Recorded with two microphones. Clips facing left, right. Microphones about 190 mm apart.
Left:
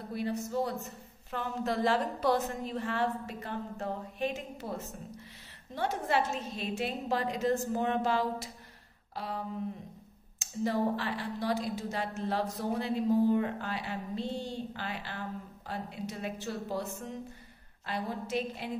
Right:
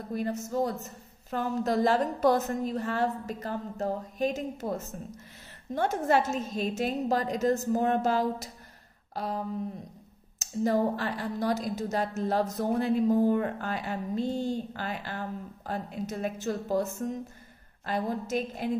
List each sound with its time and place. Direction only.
0.1 s a woman's voice: 45° right (ahead or behind)
10.4 s a woman's voice: 45° right (ahead or behind)